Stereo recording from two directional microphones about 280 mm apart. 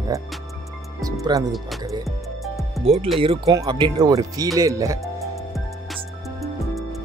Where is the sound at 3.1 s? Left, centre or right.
Centre.